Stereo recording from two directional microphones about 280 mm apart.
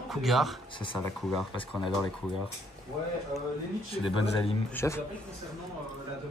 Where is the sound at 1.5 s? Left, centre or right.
Centre.